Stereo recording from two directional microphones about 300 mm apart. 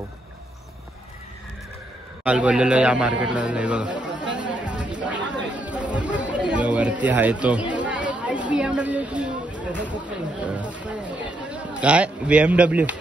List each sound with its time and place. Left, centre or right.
2.2 s a man's voice: centre
4.9 s chatter: centre
9.7 s speech: centre